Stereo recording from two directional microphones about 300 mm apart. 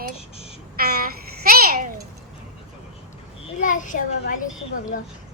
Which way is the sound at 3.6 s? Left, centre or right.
Left.